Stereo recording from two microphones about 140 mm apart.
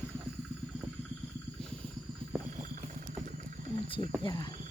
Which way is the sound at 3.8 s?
40° left (ahead or behind).